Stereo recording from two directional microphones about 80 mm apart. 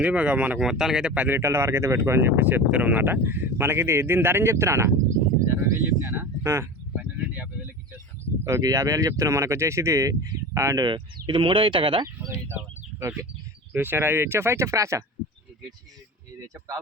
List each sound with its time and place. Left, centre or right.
0.0 s speech: centre
0.6 s speech: centre
1.4 s speech: right
6.9 s a sound: centre
8.4 s speech: right
10.8 s speech: right
13.0 s speech: right